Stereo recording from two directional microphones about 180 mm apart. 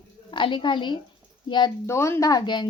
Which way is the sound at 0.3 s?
25° left (ahead or behind).